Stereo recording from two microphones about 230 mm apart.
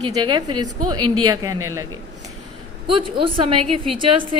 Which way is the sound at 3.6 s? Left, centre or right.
Right.